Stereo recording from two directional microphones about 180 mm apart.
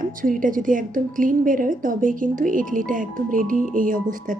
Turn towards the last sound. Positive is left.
turn(degrees=-50)  # may be behind; listen again after turning